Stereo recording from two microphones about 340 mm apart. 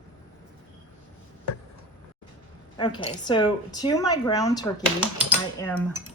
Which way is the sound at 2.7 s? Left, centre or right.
Centre.